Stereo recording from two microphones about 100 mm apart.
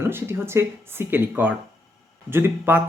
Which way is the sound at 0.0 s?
25° right (ahead or behind).